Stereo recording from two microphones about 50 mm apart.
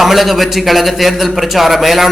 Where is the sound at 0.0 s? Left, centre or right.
Centre.